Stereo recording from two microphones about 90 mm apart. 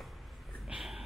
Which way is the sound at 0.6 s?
5° right (ahead or behind).